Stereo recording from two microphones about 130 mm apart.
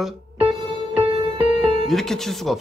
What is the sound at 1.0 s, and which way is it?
Music, 45° right (ahead or behind).